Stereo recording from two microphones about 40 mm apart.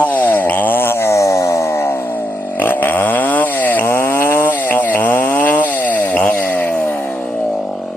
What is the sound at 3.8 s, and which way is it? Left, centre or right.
Chainsaw, left.